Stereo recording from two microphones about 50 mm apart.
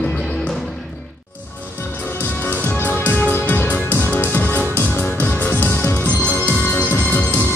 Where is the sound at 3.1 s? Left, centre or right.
Left.